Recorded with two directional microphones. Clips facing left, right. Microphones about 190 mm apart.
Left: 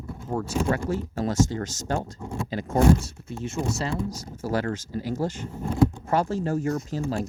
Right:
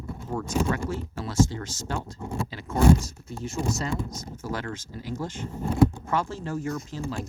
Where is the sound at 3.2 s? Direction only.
25° left (ahead or behind).